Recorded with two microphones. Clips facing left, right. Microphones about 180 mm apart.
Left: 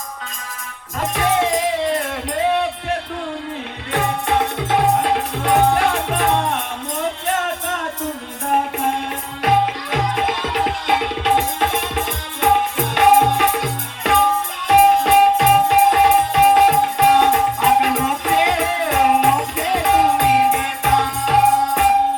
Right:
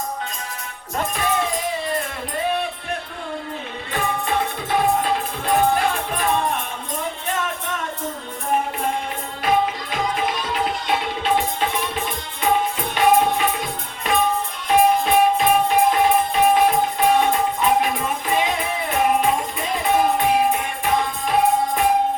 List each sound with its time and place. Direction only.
1.0 s music: 75° left (ahead or behind)
3.9 s music: 65° left (ahead or behind)
9.4 s music: 70° left (ahead or behind)